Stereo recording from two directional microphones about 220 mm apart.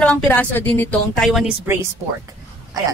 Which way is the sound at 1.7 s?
10° right (ahead or behind).